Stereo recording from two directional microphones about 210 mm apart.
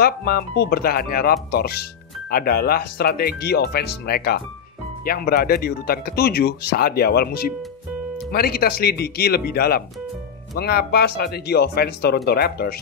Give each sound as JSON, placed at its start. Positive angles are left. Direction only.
{"t": 0.0, "sound": "speech", "side_deg": 50}